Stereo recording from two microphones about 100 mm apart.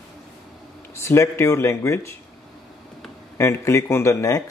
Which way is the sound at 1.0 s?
25° left (ahead or behind).